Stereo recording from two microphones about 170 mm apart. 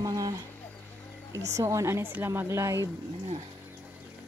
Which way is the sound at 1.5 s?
20° right (ahead or behind).